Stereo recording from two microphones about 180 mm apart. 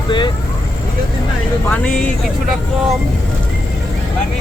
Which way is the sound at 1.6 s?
5° left (ahead or behind).